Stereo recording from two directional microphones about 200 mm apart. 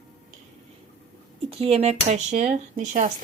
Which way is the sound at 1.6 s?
30° right (ahead or behind).